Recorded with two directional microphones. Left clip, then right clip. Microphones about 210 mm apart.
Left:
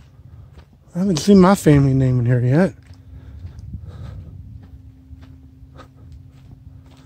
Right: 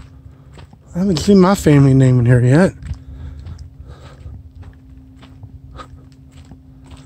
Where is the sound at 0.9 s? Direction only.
20° left (ahead or behind).